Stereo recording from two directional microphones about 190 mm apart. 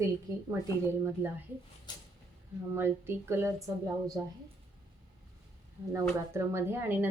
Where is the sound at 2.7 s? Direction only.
10° right (ahead or behind).